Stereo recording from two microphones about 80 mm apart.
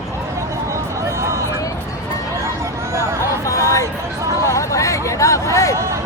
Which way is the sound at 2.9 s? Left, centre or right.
Right.